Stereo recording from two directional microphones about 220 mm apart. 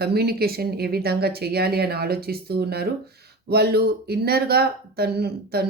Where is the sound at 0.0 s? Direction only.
45° right (ahead or behind).